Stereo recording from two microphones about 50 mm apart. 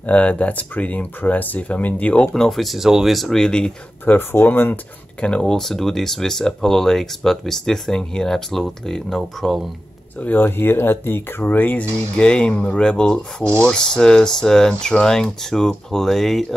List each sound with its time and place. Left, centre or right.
0.0 s speech: left
2.3 s speech: centre
3.3 s speech: centre
4.0 s speech: left
5.2 s speech: centre
10.2 s speech: left
12.2 s speech: left